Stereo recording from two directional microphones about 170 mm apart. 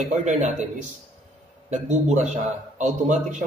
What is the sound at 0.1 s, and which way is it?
A man's voice, 45° right (ahead or behind).